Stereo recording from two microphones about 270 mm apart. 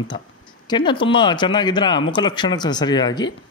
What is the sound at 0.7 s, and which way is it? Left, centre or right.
Speech, centre.